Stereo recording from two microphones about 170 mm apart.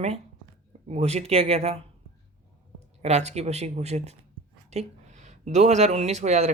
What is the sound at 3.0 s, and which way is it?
Speech, 40° right (ahead or behind).